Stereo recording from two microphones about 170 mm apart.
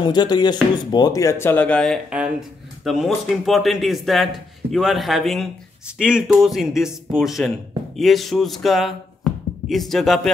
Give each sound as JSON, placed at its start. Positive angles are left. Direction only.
{"t": 0.0, "sound": "speech", "side_deg": 25}